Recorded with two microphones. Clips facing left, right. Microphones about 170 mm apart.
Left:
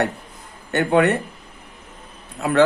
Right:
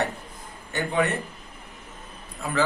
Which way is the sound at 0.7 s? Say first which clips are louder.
Left 8 dB; 75° left (ahead or behind).